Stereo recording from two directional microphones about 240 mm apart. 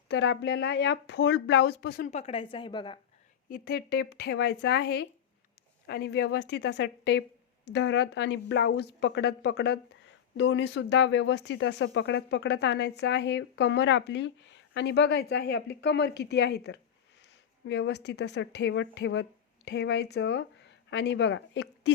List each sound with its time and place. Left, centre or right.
0.1 s speech: left
2.0 s a woman's voice: left
3.5 s speech: left